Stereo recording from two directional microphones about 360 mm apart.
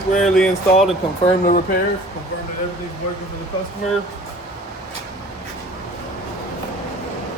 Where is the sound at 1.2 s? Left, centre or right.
Left.